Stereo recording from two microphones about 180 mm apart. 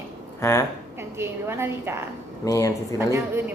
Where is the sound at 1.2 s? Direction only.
15° right (ahead or behind).